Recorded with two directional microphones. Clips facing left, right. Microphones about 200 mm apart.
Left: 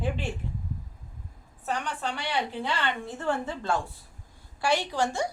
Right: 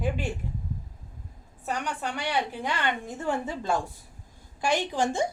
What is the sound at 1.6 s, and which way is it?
A woman's voice, 15° right (ahead or behind).